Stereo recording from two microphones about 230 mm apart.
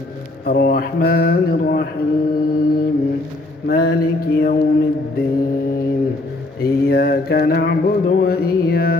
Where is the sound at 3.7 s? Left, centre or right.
Left.